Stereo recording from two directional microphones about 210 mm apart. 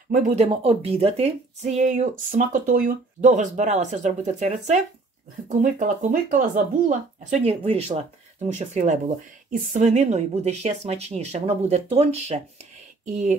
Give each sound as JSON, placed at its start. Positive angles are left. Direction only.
{"t": 0.1, "sound": "speech", "side_deg": -35}